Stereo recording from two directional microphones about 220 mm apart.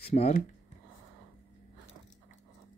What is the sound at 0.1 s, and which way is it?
Speech, 30° left (ahead or behind).